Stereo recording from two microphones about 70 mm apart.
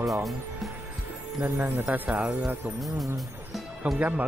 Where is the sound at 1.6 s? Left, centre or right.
Right.